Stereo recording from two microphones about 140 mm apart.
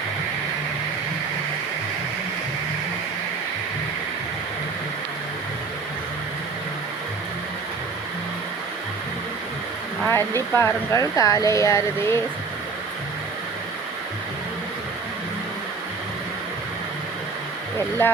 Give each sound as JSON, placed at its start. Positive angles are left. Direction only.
{"t": 10.1, "sound": "speech", "side_deg": 15}